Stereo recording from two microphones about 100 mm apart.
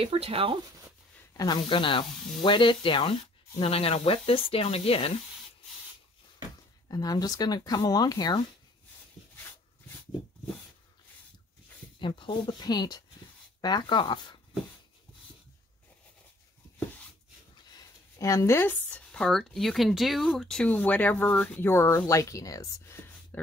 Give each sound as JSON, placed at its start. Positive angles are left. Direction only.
{"t": 0.0, "sound": "speech", "side_deg": -80}
{"t": 1.3, "sound": "speech", "side_deg": 40}
{"t": 1.6, "sound": "speech", "side_deg": 60}
{"t": 6.9, "sound": "speech", "side_deg": 40}
{"t": 12.0, "sound": "speech", "side_deg": 55}
{"t": 17.7, "sound": "a sound", "side_deg": 30}
{"t": 19.2, "sound": "speech", "side_deg": 5}
{"t": 22.9, "sound": "whispering", "side_deg": 20}